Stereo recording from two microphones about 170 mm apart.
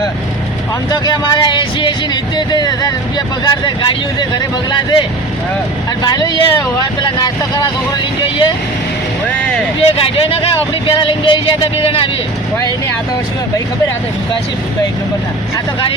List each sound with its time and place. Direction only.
0.9 s speech: 25° left (ahead or behind)
9.9 s speech: 35° left (ahead or behind)